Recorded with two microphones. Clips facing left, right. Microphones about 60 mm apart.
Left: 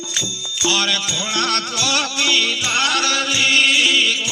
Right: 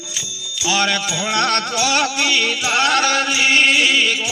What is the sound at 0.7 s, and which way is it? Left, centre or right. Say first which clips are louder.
Music: right 2 dB; right.